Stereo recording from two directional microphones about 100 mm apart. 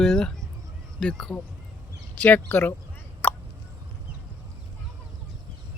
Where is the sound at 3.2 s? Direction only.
15° left (ahead or behind).